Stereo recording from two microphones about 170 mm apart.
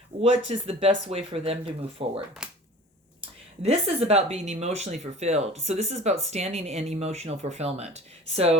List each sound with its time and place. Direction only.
0.2 s speech: 35° right (ahead or behind)